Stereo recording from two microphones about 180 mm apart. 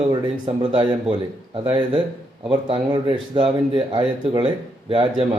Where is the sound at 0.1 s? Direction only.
25° right (ahead or behind).